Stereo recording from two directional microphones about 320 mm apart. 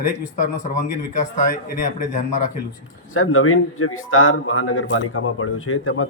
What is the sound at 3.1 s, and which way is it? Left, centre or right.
A man's voice, left.